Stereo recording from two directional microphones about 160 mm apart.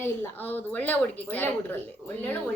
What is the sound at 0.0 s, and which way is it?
Speech, 10° left (ahead or behind).